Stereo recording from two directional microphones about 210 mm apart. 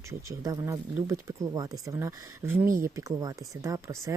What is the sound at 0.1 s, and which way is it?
Speech, 15° right (ahead or behind).